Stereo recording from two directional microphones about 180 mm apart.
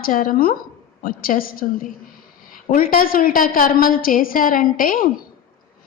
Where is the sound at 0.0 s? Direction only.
50° left (ahead or behind).